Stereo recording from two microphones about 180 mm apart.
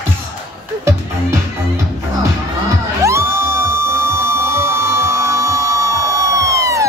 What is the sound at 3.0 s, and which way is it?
Music, 15° right (ahead or behind).